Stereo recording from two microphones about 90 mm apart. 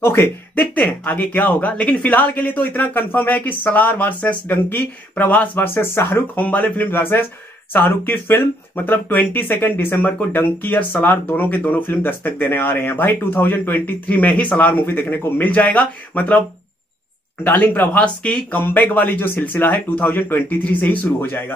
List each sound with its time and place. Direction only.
0.0 s speech: 25° left (ahead or behind)